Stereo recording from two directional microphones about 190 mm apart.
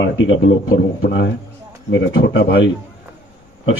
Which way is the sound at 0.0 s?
90° left.